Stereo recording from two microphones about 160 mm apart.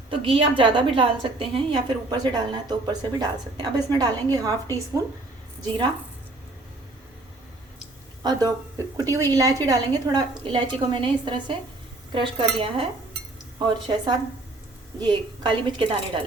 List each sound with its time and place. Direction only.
0.1 s a woman's voice: 35° right (ahead or behind)
8.2 s a woman's voice: 25° right (ahead or behind)